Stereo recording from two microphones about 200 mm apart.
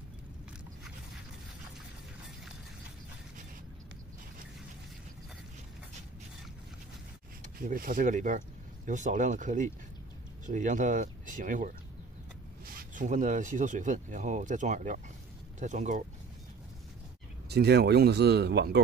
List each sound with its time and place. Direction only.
7.4 s speech: 45° right (ahead or behind)
12.9 s speech: 40° right (ahead or behind)
17.5 s speech: 55° right (ahead or behind)